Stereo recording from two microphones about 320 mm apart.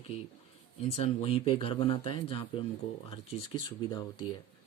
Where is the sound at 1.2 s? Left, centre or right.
Centre.